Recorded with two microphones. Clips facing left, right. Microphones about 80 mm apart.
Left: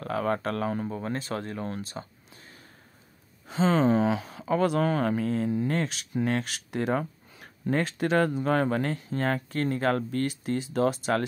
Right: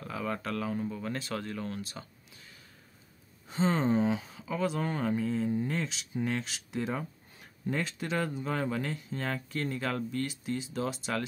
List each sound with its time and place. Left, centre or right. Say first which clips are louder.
0.0 s speech: left 7 dB; left
3.4 s speech: left 5 dB; left
7.7 s speech: left 8 dB; left